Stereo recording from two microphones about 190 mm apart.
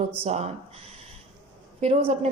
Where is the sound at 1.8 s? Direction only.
30° right (ahead or behind).